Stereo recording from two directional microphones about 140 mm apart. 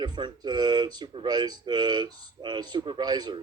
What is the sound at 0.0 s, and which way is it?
Speech, 30° right (ahead or behind).